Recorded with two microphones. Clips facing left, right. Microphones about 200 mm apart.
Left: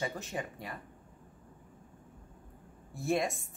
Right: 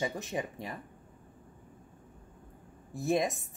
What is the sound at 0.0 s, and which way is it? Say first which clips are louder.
Speech: right 3 dB; 20° right (ahead or behind).